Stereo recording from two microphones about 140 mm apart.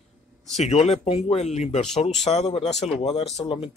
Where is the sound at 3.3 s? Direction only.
40° left (ahead or behind).